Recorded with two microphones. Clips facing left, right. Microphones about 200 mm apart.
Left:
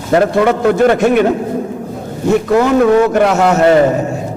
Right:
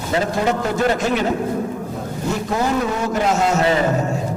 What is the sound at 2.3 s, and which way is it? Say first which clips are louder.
A man's voice: left 10 dB; 65° left (ahead or behind).